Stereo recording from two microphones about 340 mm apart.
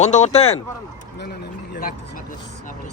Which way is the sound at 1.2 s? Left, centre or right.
Left.